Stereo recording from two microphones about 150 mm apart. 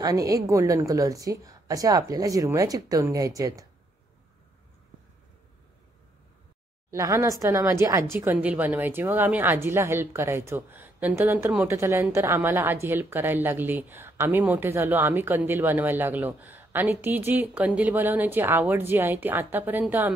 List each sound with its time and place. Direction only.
0.0 s a woman's voice: 25° right (ahead or behind)
6.9 s a woman's voice: 20° right (ahead or behind)